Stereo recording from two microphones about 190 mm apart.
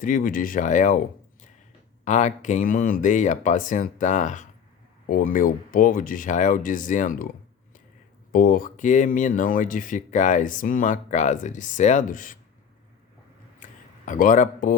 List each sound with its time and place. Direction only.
0.0 s speech: 45° left (ahead or behind)
2.0 s speech: 40° left (ahead or behind)
8.3 s speech: 45° left (ahead or behind)
13.6 s a sound: 40° left (ahead or behind)